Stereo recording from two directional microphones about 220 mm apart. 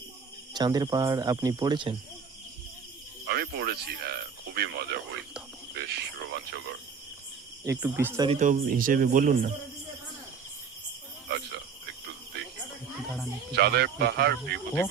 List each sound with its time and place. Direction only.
0.5 s speech: 20° right (ahead or behind)
3.2 s speech: 45° right (ahead or behind)
7.6 s speech: 10° right (ahead or behind)
8.3 s speech: 35° right (ahead or behind)
11.3 s cricket: 50° right (ahead or behind)
13.5 s speech: 45° right (ahead or behind)